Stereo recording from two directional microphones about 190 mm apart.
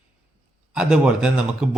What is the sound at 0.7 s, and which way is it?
Speech, 5° right (ahead or behind).